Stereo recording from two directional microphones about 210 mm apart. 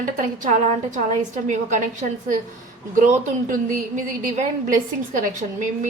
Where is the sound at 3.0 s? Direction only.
35° right (ahead or behind).